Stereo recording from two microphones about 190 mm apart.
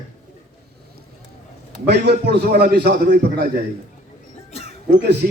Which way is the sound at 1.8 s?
60° right (ahead or behind).